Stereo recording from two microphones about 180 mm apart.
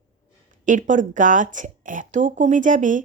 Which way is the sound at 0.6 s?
45° right (ahead or behind).